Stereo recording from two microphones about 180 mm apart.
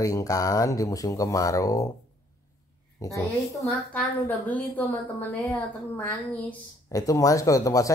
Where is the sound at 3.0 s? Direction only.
20° left (ahead or behind).